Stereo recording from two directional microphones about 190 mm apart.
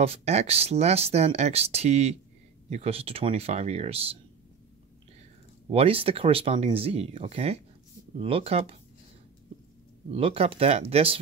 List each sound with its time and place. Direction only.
0.0 s speech: 35° right (ahead or behind)
5.7 s speech: 30° right (ahead or behind)
10.1 s speech: 30° right (ahead or behind)